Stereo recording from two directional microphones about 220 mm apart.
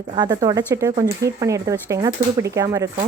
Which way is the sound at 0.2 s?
15° right (ahead or behind).